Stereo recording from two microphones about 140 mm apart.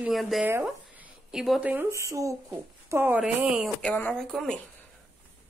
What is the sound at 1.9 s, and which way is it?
Speech, 20° right (ahead or behind).